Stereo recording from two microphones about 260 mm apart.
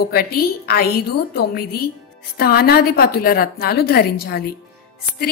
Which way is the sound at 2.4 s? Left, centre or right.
Left.